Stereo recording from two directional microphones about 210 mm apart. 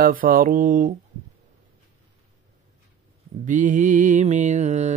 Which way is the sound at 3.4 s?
35° right (ahead or behind).